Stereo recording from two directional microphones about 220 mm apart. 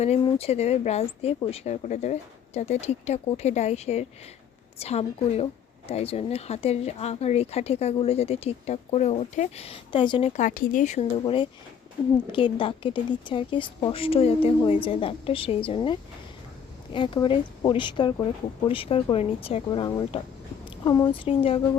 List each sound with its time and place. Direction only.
0.0 s speech: 30° left (ahead or behind)